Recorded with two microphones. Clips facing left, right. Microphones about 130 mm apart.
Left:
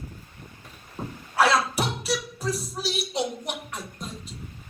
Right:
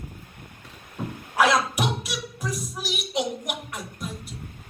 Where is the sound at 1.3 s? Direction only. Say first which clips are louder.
Even; 15° right (ahead or behind).